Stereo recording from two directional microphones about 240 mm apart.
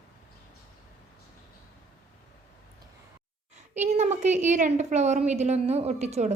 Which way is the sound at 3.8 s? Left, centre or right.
Right.